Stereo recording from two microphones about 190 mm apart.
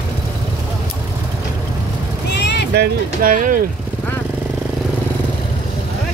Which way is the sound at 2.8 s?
45° right (ahead or behind).